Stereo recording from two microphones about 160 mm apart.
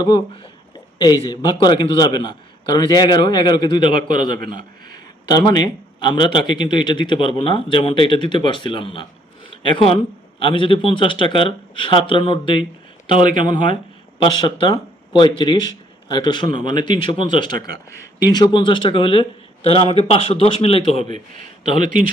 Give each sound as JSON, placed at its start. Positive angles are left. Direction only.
{"t": 0.9, "sound": "speech", "side_deg": 25}
{"t": 4.4, "sound": "speech", "side_deg": -65}
{"t": 4.9, "sound": "speech", "side_deg": 25}
{"t": 13.1, "sound": "speech", "side_deg": -55}
{"t": 13.5, "sound": "speech", "side_deg": 30}
{"t": 21.8, "sound": "speech", "side_deg": -55}